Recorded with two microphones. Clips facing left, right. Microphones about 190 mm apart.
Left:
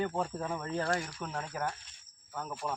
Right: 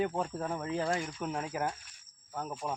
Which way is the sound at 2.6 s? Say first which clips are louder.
Left 1 dB; 15° right (ahead or behind).